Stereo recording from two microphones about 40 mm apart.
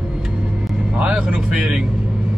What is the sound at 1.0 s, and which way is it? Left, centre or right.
Speech, right.